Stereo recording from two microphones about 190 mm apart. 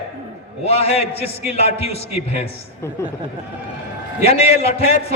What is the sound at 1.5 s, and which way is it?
Speech, 35° left (ahead or behind).